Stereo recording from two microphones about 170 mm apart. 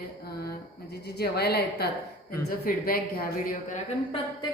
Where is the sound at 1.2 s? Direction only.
70° left (ahead or behind).